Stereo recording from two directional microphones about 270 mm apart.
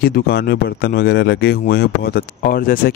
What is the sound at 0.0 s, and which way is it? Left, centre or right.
Speech, left.